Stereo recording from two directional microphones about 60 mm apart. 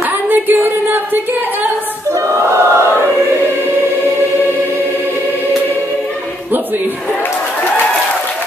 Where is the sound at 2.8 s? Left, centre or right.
Left.